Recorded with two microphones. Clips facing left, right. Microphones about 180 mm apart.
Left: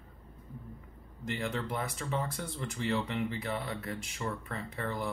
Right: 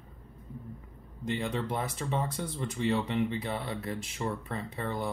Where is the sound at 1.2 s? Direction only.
20° right (ahead or behind).